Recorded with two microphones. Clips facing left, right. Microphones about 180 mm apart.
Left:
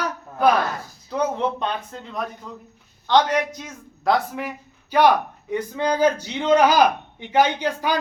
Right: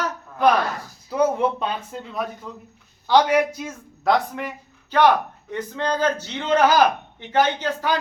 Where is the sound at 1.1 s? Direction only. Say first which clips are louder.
Right 3 dB; 5° right (ahead or behind); by 8.0 s 10° left (ahead or behind).